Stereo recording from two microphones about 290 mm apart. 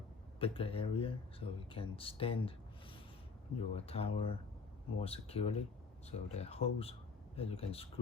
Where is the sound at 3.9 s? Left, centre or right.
Centre.